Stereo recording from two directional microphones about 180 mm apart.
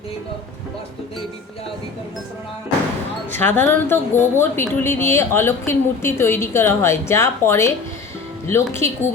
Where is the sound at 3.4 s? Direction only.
10° left (ahead or behind).